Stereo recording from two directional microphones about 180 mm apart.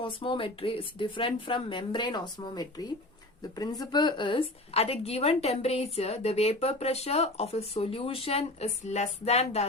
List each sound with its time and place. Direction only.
0.0 s a woman's voice: 30° left (ahead or behind)